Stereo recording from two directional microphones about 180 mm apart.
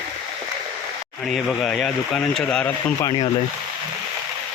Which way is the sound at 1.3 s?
Centre (ahead or behind).